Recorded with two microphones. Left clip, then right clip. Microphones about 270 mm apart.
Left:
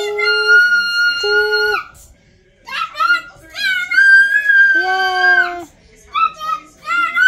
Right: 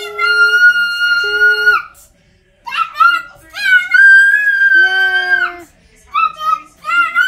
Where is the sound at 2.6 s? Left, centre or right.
Right.